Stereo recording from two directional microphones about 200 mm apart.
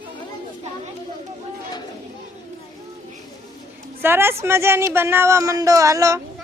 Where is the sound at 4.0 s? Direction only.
10° right (ahead or behind).